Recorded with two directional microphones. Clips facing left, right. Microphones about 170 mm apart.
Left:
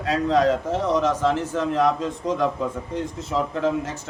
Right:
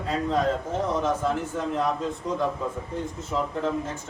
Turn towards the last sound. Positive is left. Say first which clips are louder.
# left 4 dB
turn(degrees=90)